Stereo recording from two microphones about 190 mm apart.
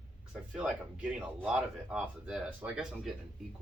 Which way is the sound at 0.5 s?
5° right (ahead or behind).